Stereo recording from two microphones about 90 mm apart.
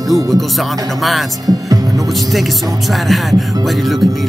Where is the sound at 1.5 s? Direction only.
40° right (ahead or behind).